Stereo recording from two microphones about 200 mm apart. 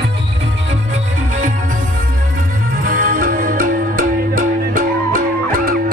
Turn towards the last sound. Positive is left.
turn(degrees=-45)  # may be behind; listen again after turning